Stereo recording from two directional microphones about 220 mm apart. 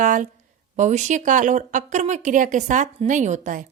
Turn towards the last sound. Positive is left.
turn(degrees=-35)  # may be behind; listen again after turning